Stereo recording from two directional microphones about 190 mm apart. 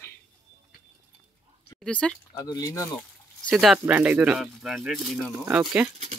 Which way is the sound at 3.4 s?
Centre (ahead or behind).